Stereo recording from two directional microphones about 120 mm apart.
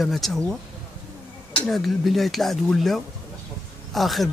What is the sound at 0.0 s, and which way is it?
Speech, centre (ahead or behind).